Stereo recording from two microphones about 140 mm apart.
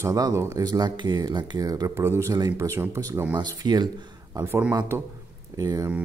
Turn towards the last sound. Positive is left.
turn(degrees=-25)  # may be behind; listen again after turning